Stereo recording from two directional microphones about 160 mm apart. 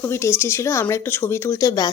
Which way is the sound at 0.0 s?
15° left (ahead or behind).